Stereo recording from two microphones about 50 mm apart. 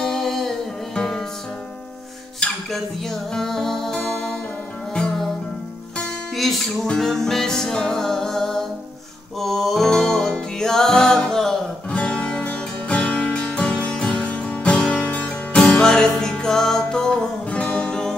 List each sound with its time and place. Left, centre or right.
0.0 s music: centre
2.7 s music: centre
6.3 s music: centre
9.8 s music: centre
11.9 s music: left